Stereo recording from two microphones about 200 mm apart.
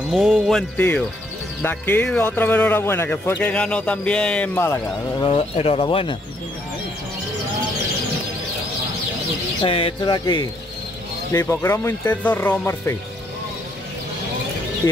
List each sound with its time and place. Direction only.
0.1 s speech: centre (ahead or behind)
5.2 s speech: 30° left (ahead or behind)
9.6 s speech: 30° left (ahead or behind); by 12.9 s 15° left (ahead or behind)